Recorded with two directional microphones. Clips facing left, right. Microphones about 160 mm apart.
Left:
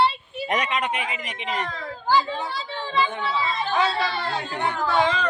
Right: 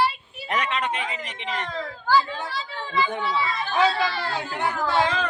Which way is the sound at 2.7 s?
30° left (ahead or behind).